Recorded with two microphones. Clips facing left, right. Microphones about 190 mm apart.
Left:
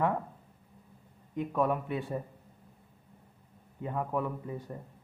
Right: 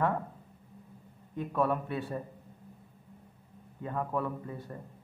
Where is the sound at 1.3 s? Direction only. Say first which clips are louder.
Even; 15° left (ahead or behind).